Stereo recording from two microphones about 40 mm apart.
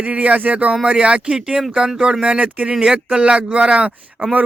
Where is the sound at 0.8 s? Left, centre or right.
Right.